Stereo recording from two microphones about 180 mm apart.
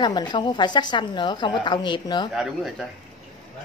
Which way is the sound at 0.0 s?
25° left (ahead or behind).